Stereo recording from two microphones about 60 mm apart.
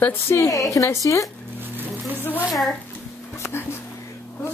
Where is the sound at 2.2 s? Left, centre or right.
Left.